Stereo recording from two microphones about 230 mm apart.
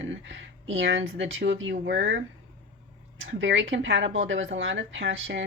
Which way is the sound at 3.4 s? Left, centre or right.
Right.